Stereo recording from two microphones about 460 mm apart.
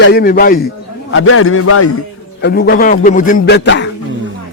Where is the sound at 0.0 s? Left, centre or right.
Centre.